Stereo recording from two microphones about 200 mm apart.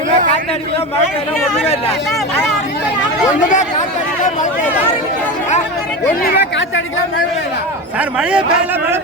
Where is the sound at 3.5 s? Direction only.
35° left (ahead or behind).